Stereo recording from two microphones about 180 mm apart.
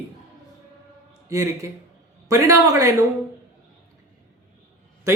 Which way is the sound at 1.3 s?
15° right (ahead or behind).